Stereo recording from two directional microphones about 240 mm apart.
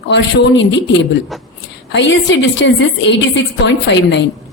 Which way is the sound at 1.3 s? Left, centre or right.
Centre.